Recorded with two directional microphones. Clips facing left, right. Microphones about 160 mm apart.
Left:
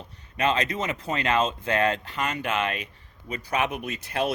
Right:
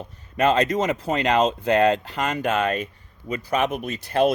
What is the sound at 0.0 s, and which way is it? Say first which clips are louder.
Speech: right 5 dB; 45° right (ahead or behind).